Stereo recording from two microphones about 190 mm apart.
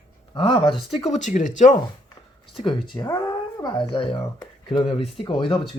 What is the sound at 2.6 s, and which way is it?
A child's voice, 25° left (ahead or behind).